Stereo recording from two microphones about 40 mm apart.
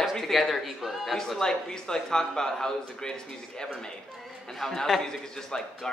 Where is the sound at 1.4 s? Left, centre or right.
Centre.